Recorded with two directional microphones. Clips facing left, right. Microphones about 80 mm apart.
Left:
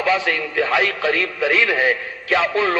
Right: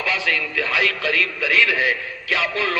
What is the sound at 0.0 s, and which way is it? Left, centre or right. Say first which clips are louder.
A man's voice: left 4 dB; left.